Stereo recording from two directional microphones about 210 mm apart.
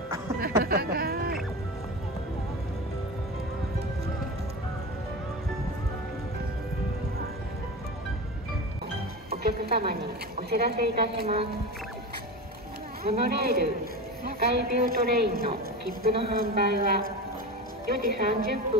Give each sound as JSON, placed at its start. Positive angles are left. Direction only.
{"t": 0.4, "sound": "a sound", "side_deg": -45}
{"t": 9.3, "sound": "a woman's voice", "side_deg": -50}
{"t": 13.0, "sound": "a woman's voice", "side_deg": -50}